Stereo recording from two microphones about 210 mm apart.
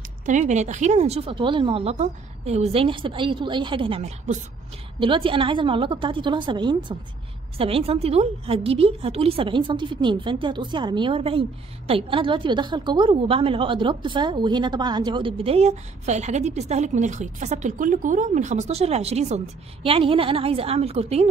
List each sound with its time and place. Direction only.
0.2 s a woman's voice: 35° right (ahead or behind)